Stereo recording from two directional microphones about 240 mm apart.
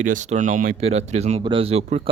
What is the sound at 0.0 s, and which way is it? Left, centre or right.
Speech, right.